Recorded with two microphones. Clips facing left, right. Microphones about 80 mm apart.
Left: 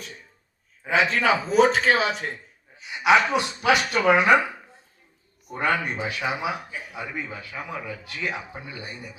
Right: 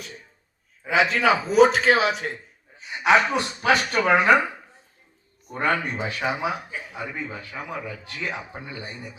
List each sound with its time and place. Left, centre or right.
0.9 s a man's voice: centre
2.7 s a man's voice: right
5.5 s a man's voice: right
7.9 s a man's voice: right